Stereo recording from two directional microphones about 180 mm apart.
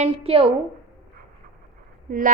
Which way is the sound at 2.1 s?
50° right (ahead or behind).